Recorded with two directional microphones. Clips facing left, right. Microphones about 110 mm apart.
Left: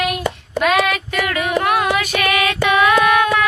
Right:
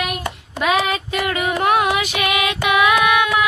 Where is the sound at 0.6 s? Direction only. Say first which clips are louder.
Left 2 dB; 20° right (ahead or behind).